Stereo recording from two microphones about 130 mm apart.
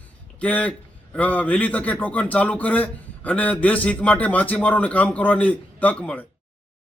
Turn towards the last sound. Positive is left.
turn(degrees=10)  # may be behind; listen again after turning